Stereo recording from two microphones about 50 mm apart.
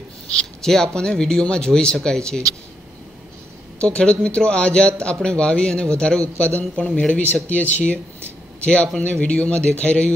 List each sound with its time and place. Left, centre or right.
0.3 s a sound: centre
0.9 s speech: centre
3.8 s speech: left